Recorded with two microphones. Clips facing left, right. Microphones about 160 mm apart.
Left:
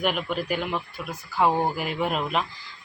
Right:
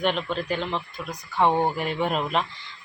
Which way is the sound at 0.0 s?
10° left (ahead or behind).